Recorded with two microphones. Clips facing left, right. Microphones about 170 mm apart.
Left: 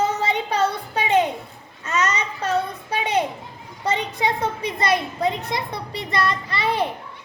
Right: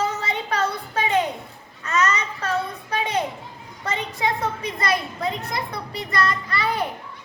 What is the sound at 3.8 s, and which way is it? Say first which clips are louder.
A child's voice: left 3 dB; 25° left (ahead or behind).